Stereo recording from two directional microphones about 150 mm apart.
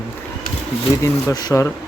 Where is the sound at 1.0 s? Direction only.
25° left (ahead or behind).